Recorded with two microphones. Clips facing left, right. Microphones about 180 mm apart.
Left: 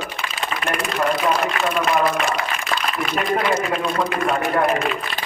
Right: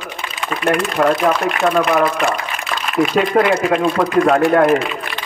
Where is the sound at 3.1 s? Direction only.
75° right (ahead or behind).